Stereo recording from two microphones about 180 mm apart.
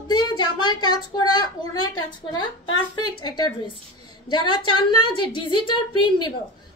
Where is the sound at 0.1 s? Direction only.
25° left (ahead or behind).